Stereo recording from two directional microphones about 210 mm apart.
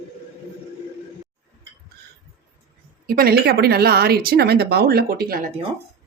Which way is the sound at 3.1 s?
45° right (ahead or behind).